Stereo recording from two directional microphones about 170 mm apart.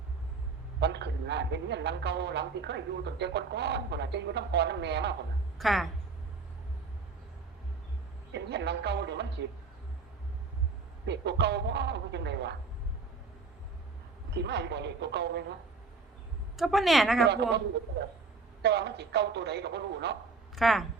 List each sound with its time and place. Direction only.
0.8 s a woman's voice: 85° right
5.5 s a woman's voice: centre (ahead or behind)
8.3 s a woman's voice: 90° right
11.0 s a woman's voice: 90° right
14.3 s speech: 90° right
16.6 s a woman's voice: centre (ahead or behind)
17.2 s a woman's voice: 85° right
18.6 s a woman's voice: 80° right
20.6 s a woman's voice: centre (ahead or behind)